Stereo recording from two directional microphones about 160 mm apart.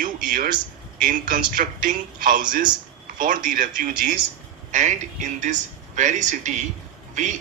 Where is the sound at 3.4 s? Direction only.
60° right (ahead or behind).